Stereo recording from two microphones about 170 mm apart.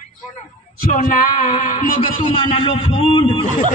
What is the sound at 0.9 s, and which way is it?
Speech, 55° left (ahead or behind).